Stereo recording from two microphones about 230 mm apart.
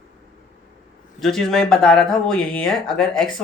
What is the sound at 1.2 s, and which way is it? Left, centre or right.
Speech, centre.